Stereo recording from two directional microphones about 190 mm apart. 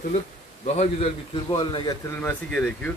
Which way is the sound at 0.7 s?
35° left (ahead or behind).